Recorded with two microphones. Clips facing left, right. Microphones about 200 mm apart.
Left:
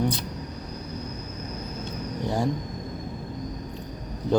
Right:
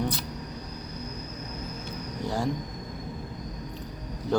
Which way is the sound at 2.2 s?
15° left (ahead or behind).